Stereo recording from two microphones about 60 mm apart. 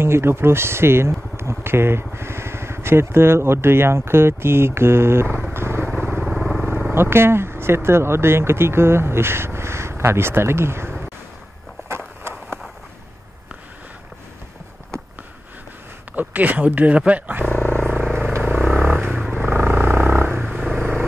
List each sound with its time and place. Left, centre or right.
0.0 s speech: right
5.5 s vehicle: right
5.9 s vehicle: right
6.3 s vehicle: centre
6.9 s speech: right
12.2 s a sound: right
16.2 s speech: right
17.5 s a sound: left
18.4 s vehicle: right
19.4 s a sound: right
20.7 s vehicle: right